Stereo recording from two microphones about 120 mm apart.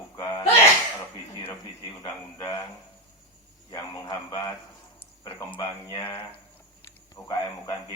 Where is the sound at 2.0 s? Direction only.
30° left (ahead or behind).